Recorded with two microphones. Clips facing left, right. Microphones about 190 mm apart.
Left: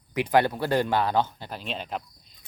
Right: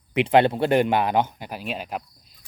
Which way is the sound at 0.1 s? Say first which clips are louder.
Right 4 dB; 25° right (ahead or behind).